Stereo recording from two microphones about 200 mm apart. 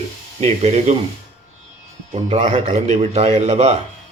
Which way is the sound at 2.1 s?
30° right (ahead or behind).